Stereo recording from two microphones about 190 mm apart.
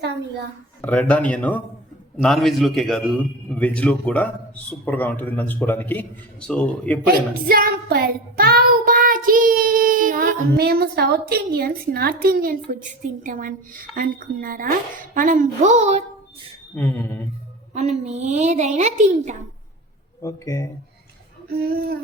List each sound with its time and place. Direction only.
0.8 s a man's voice: 5° left (ahead or behind)
7.4 s child singing: 50° right (ahead or behind)
10.6 s a woman's voice: 55° right (ahead or behind); by 16.0 s 35° right (ahead or behind)
16.7 s a man's voice: 10° left (ahead or behind)
17.7 s a child's voice: 35° right (ahead or behind)
20.2 s a man's voice: 15° left (ahead or behind)
21.5 s speech: 55° right (ahead or behind)